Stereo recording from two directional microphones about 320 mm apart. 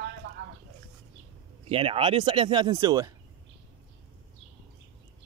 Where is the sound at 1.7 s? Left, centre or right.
Centre.